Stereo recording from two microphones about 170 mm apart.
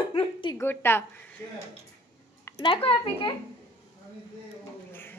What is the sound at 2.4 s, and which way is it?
Speech, 25° left (ahead or behind).